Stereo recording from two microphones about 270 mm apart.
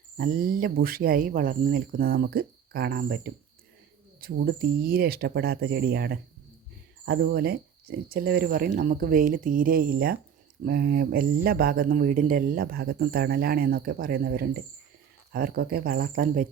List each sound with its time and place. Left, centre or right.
0.2 s speech: right